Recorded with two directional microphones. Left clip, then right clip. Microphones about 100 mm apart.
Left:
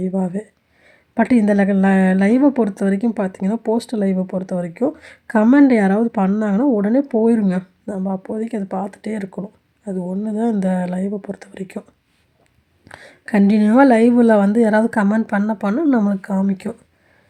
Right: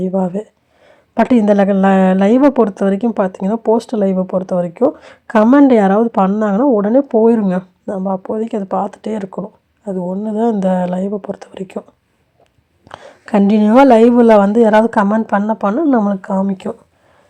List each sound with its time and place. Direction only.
0.0 s speech: centre (ahead or behind)
12.9 s speech: centre (ahead or behind)